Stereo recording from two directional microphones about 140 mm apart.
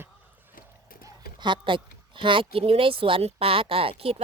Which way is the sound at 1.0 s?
35° right (ahead or behind).